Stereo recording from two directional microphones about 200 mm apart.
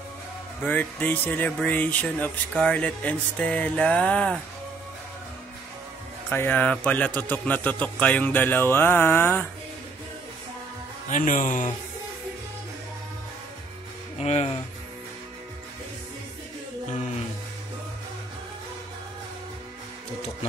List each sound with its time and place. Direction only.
0.7 s speech: 10° left (ahead or behind)
6.3 s speech: 10° left (ahead or behind)
11.1 s speech: 40° left (ahead or behind)
14.1 s speech: 30° left (ahead or behind)